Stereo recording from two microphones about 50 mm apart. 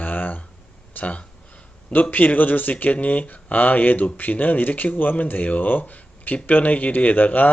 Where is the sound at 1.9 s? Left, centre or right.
Left.